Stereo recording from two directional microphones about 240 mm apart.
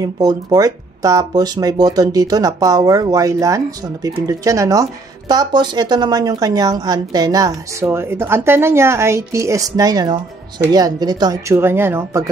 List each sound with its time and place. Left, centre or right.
0.0 s speech: centre